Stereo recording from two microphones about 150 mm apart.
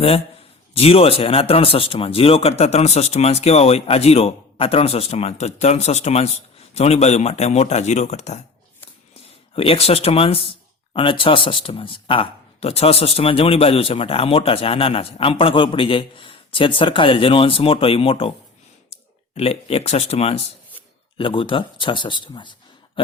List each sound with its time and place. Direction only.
0.7 s speech: 40° left (ahead or behind)
9.6 s speech: 40° left (ahead or behind)